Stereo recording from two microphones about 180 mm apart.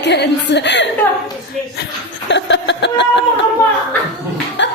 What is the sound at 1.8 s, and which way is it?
Chuckle, 80° left.